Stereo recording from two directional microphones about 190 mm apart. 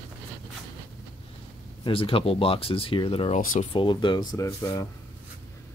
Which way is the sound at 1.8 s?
30° left (ahead or behind).